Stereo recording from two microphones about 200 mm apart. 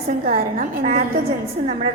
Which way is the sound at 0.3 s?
45° right (ahead or behind).